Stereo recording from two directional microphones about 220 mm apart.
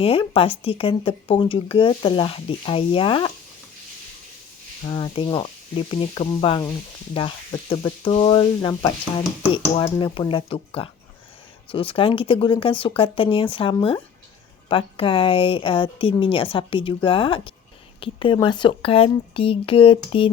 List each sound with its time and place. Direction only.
0.0 s speech: 25° left (ahead or behind)
4.9 s speech: 20° left (ahead or behind)